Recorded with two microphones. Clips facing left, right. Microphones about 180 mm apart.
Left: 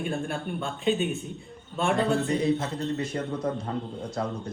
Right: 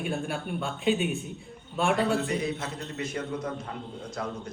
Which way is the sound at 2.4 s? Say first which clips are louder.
Left 6 dB; 30° left (ahead or behind).